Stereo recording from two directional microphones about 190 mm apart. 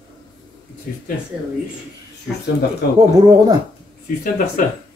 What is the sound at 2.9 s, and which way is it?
Speech, 20° right (ahead or behind).